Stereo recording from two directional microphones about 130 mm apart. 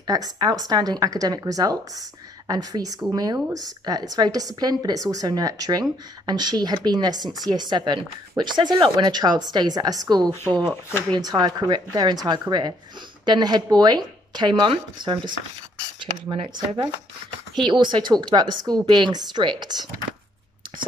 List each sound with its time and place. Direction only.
0.0 s a woman's voice: 30° right (ahead or behind)
10.9 s speech: 15° left (ahead or behind)
11.1 s a woman's voice: 30° right (ahead or behind)